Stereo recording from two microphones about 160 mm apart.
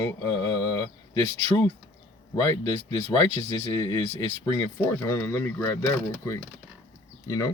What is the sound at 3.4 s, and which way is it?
Speech, 20° left (ahead or behind).